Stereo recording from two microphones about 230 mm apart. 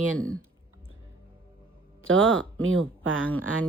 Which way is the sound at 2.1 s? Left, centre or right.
Right.